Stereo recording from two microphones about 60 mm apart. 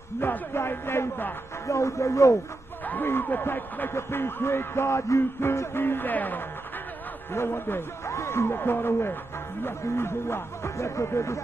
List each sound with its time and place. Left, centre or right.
0.5 s music: left
1.7 s speech: left
2.8 s a sound: left
3.1 s speech: left
3.9 s music: left
5.4 s speech: left
7.3 s music: left
8.5 s speech: left
9.7 s music: left